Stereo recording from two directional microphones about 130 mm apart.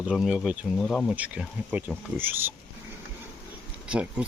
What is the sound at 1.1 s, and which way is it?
Speech, 10° right (ahead or behind).